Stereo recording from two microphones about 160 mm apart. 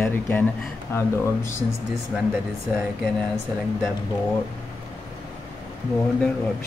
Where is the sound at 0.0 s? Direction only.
15° left (ahead or behind).